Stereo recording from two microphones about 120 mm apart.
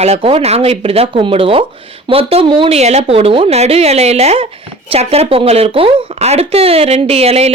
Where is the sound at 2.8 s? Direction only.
65° right (ahead or behind).